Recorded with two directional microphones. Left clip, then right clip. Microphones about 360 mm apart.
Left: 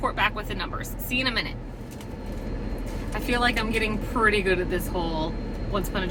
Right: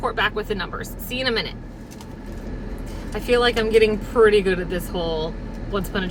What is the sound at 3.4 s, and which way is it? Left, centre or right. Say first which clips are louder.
Speech: right 8 dB; centre.